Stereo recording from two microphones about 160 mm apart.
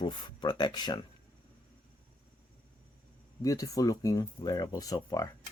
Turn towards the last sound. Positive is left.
turn(degrees=20)  # may be behind; listen again after turning